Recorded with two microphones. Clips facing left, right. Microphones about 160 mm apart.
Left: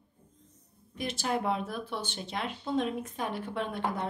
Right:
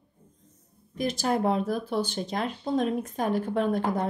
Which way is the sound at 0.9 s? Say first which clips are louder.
Right 5 dB; 40° right (ahead or behind).